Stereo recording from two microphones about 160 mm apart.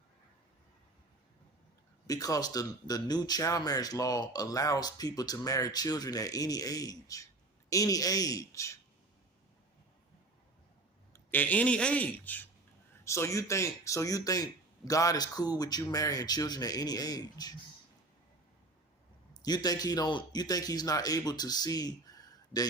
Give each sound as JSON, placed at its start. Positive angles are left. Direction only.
{"t": 2.0, "sound": "speech", "side_deg": 20}
{"t": 11.1, "sound": "a man's voice", "side_deg": 10}
{"t": 19.3, "sound": "a man's voice", "side_deg": 25}